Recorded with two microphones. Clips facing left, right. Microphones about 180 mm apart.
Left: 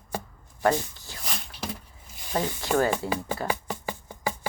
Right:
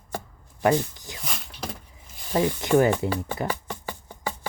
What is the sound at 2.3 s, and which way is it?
Speech, 20° right (ahead or behind).